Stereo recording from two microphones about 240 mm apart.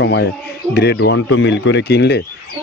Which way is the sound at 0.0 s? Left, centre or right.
Left.